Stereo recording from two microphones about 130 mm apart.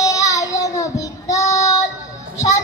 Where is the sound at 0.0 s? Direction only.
25° left (ahead or behind).